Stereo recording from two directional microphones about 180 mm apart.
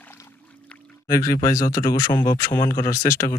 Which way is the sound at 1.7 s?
20° left (ahead or behind).